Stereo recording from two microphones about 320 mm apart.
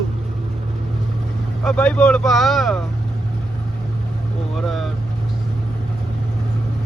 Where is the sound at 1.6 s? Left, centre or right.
Centre.